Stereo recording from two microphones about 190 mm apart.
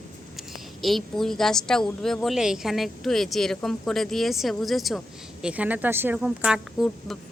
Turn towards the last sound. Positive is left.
turn(degrees=0)  # may be behind; listen again after turning